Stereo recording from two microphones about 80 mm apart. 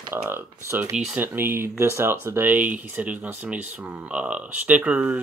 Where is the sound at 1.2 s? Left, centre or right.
Right.